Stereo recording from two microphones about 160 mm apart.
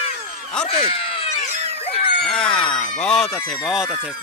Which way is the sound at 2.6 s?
25° left (ahead or behind).